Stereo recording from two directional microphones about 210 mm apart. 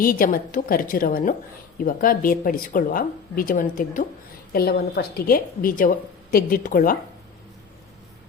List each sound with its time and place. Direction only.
0.0 s a woman's voice: 40° left (ahead or behind)